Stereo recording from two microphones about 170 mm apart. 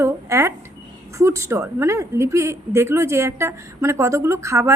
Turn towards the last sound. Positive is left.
turn(degrees=-15)  # may be behind; listen again after turning